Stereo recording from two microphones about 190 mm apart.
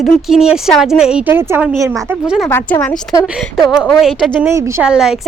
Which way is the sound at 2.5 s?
10° left (ahead or behind).